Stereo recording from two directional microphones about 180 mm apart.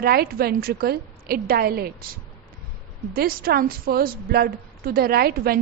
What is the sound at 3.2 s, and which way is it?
A woman's voice, 55° right (ahead or behind).